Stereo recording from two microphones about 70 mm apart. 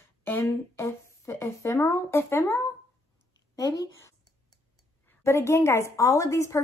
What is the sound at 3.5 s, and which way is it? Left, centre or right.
Speech, left.